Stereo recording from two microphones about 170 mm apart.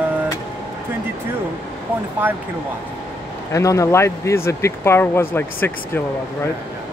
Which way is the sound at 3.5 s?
20° left (ahead or behind).